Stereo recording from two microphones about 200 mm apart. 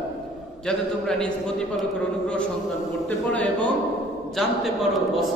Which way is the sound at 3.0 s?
5° left (ahead or behind).